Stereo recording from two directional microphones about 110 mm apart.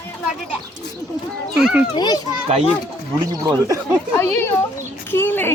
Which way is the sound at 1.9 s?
40° left (ahead or behind).